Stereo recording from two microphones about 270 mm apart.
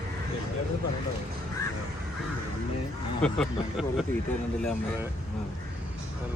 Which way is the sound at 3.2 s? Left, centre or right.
Centre.